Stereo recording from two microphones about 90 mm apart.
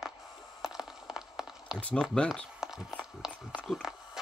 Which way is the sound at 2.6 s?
5° right (ahead or behind).